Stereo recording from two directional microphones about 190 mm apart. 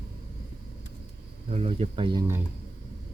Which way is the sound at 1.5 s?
30° right (ahead or behind).